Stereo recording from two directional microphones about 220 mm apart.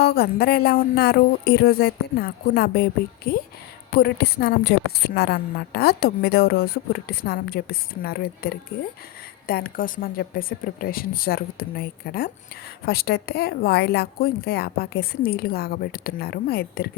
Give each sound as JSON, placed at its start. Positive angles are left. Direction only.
{"t": 0.0, "sound": "a woman's voice", "side_deg": 45}